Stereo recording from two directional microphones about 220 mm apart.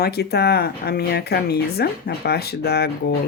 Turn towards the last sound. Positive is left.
turn(degrees=45)  # may be behind; listen again after turning